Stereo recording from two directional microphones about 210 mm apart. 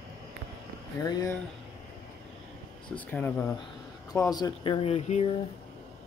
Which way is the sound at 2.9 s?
10° left (ahead or behind).